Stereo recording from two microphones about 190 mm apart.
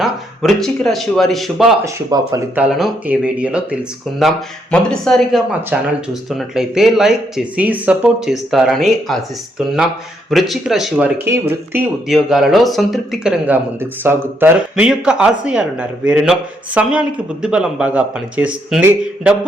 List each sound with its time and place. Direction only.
0.0 s speech: centre (ahead or behind)
1.8 s speech: 20° right (ahead or behind)
2.6 s speech: 5° right (ahead or behind)
10.2 s speech: centre (ahead or behind)